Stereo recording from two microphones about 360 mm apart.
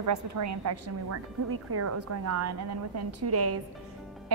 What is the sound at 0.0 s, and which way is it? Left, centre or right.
A woman's voice, right.